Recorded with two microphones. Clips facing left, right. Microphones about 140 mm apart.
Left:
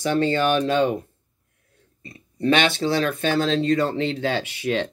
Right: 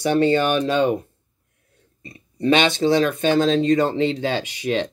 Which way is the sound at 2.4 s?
20° right (ahead or behind).